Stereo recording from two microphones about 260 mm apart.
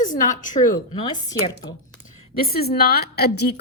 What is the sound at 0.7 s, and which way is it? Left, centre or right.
Speech, centre.